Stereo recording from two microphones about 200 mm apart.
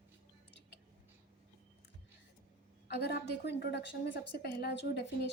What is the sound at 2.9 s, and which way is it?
A woman's voice, 55° left (ahead or behind).